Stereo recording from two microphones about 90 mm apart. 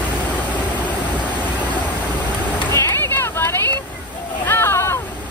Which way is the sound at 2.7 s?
30° left (ahead or behind).